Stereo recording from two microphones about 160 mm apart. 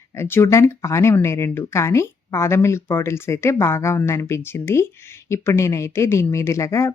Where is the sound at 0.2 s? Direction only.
15° left (ahead or behind).